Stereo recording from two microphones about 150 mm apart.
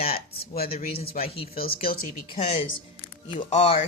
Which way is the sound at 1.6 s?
75° left (ahead or behind).